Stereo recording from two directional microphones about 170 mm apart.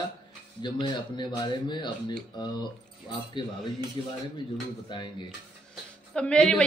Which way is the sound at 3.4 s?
25° left (ahead or behind).